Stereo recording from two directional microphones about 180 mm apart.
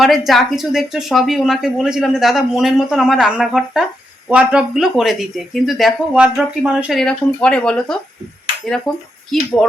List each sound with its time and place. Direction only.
0.0 s speech: centre (ahead or behind)